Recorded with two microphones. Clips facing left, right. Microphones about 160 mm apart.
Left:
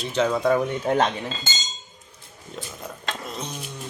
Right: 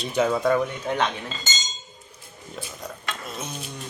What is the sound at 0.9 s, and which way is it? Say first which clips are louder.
Speech: left 5 dB; 35° left (ahead or behind).